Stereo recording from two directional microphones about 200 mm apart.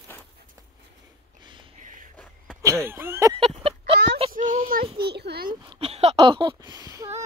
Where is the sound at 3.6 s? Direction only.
25° right (ahead or behind).